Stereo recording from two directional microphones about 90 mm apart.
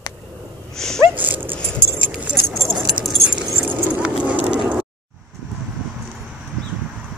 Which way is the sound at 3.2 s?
15° right (ahead or behind).